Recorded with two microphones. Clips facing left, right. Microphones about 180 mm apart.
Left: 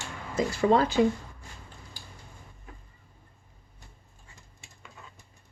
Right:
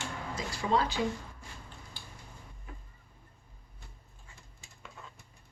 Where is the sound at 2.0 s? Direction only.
45° left (ahead or behind).